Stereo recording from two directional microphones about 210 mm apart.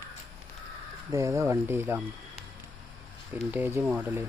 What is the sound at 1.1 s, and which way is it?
Speech, 15° right (ahead or behind).